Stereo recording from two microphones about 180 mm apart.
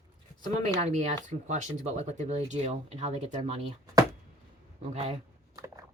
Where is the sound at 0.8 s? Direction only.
40° right (ahead or behind).